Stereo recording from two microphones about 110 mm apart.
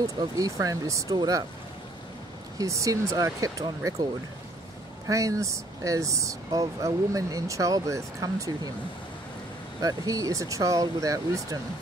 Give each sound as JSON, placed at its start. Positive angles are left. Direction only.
{"t": 0.0, "sound": "speech", "side_deg": -35}
{"t": 2.6, "sound": "speech", "side_deg": -30}
{"t": 9.8, "sound": "speech", "side_deg": -35}